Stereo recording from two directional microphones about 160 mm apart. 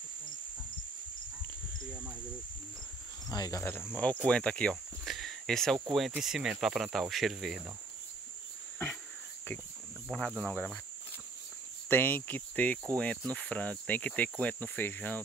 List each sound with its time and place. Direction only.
1.9 s cricket: 10° right (ahead or behind)
3.3 s cricket: 20° left (ahead or behind); by 5.8 s 5° left (ahead or behind)
5.9 s speech: centre (ahead or behind)
10.1 s cricket: 5° left (ahead or behind)
11.9 s cricket: 10° left (ahead or behind)